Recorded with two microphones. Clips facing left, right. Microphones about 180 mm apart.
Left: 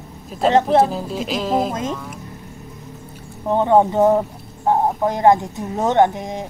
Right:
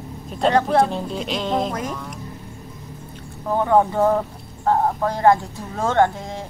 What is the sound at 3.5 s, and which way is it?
Speech, 20° left (ahead or behind).